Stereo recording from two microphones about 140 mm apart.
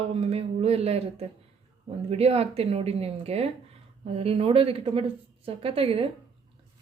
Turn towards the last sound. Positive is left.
turn(degrees=-40)  # may be behind; listen again after turning